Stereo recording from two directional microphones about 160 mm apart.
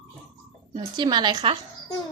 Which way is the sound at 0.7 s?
25° right (ahead or behind).